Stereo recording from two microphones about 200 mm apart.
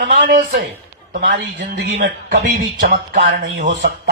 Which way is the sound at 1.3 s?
55° right (ahead or behind).